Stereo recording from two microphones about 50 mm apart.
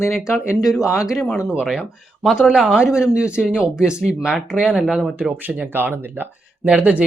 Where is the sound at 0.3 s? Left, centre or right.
Centre.